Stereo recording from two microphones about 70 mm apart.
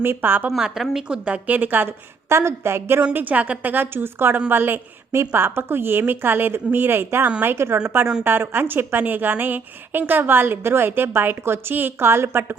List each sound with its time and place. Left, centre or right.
0.0 s a woman's voice: right
0.5 s a woman's voice: centre; by 1.9 s right
2.3 s a woman's voice: right
3.0 s a woman's voice: right